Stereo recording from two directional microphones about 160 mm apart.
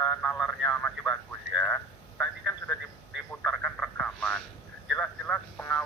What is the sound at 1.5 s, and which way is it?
Telephone, 5° left (ahead or behind).